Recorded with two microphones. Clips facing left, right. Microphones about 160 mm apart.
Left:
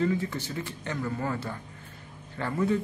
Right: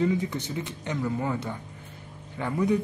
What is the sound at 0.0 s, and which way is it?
A man's voice, 15° right (ahead or behind).